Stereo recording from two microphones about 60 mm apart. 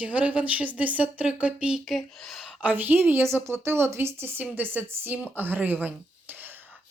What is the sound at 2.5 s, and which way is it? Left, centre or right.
Speech, right.